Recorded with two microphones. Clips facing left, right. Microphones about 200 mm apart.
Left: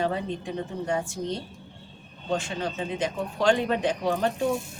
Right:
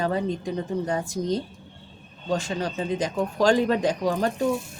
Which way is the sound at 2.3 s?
40° right (ahead or behind).